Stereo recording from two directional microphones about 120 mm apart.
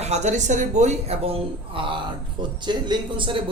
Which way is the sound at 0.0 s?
70° right (ahead or behind).